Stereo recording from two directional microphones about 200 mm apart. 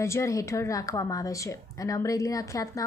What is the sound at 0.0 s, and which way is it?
Speech, 15° left (ahead or behind).